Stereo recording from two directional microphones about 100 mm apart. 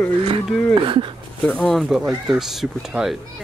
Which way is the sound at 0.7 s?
60° right (ahead or behind).